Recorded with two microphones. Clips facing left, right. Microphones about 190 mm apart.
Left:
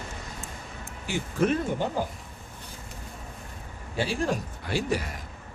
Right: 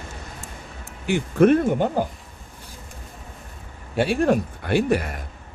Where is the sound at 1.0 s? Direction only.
60° right (ahead or behind).